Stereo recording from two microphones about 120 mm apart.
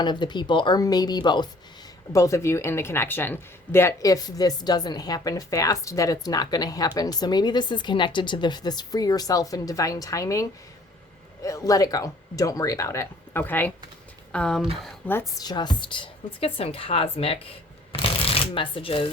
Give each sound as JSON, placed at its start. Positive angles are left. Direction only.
{"t": 0.0, "sound": "speech", "side_deg": 40}
{"t": 2.1, "sound": "speech", "side_deg": 25}
{"t": 11.4, "sound": "speech", "side_deg": 30}
{"t": 15.4, "sound": "a woman's voice", "side_deg": 35}